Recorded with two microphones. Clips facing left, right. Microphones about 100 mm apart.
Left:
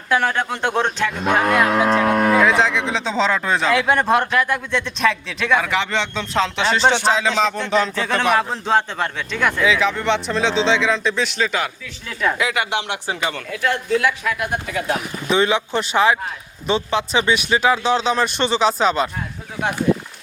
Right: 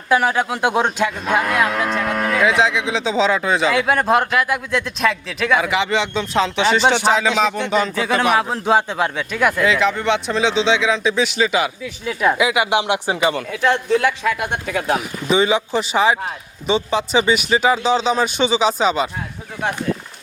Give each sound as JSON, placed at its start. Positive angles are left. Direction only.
{"t": 0.1, "sound": "speech", "side_deg": -10}
{"t": 2.4, "sound": "speech", "side_deg": 0}
{"t": 14.7, "sound": "speech", "side_deg": -40}
{"t": 15.3, "sound": "speech", "side_deg": 0}